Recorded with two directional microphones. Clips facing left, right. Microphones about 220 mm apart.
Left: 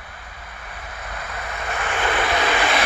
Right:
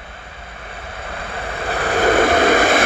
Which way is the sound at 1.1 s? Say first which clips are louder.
Right 5 dB; 30° right (ahead or behind).